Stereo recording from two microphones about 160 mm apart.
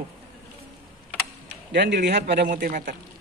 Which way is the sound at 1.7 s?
90° right.